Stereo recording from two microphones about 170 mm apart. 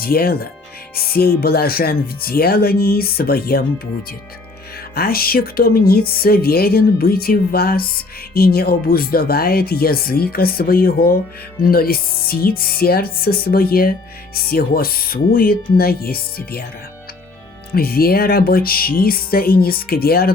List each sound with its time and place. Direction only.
0.0 s speech: 60° left (ahead or behind)
4.9 s speech: 60° left (ahead or behind)
17.7 s speech: 60° left (ahead or behind)